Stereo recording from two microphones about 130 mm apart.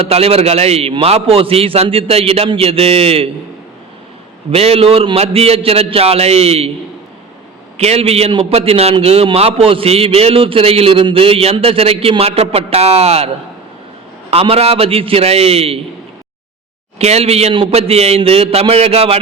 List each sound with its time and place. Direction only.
0.0 s a man's voice: 50° right (ahead or behind)
4.5 s a man's voice: 50° right (ahead or behind)
7.8 s a man's voice: 50° right (ahead or behind)
17.0 s a man's voice: 55° right (ahead or behind)